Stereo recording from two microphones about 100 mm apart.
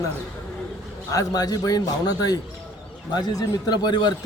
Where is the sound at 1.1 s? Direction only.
35° left (ahead or behind).